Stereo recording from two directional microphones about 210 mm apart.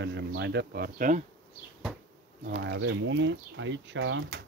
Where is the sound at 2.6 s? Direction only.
60° right (ahead or behind).